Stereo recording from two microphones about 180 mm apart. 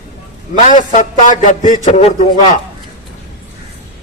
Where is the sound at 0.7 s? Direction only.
45° left (ahead or behind).